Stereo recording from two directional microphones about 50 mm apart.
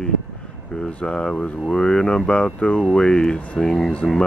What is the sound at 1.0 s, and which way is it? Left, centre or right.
Speech, centre.